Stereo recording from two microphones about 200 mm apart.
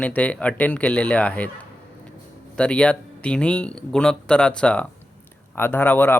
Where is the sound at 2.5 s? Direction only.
5° left (ahead or behind).